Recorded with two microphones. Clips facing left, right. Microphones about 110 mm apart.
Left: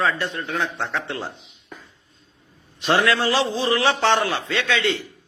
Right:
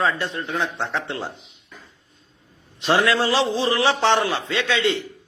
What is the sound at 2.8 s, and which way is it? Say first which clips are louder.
A man's voice: right 1 dB; 25° right (ahead or behind).